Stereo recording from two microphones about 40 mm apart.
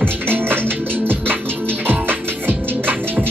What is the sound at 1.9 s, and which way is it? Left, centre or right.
Music, right.